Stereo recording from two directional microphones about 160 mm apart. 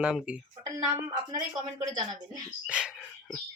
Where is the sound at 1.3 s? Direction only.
25° right (ahead or behind).